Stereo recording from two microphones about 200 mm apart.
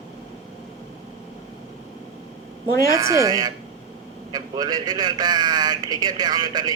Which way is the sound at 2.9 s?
15° right (ahead or behind).